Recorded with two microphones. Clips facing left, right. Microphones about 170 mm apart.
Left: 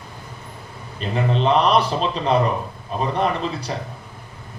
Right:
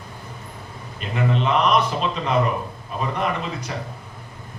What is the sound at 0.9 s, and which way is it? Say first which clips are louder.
A man's voice: left 1 dB; 35° left (ahead or behind).